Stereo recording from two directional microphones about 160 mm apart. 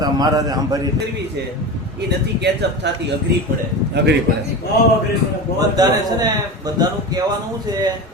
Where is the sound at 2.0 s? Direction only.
90° right.